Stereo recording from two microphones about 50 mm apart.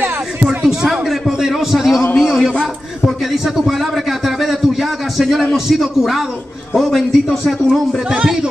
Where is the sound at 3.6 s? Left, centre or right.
Centre.